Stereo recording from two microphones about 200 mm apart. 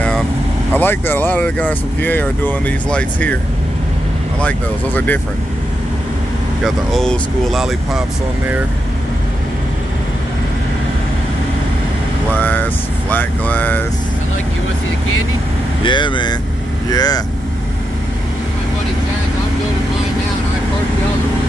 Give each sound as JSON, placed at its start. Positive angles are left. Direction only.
{"t": 0.7, "sound": "speech", "side_deg": 10}
{"t": 4.4, "sound": "speech", "side_deg": 5}
{"t": 6.6, "sound": "speech", "side_deg": 0}
{"t": 12.4, "sound": "vehicle", "side_deg": 10}
{"t": 13.1, "sound": "speech", "side_deg": 10}
{"t": 15.8, "sound": "speech", "side_deg": 25}